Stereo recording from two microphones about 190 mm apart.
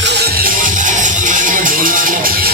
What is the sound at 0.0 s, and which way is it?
Music, 60° right (ahead or behind).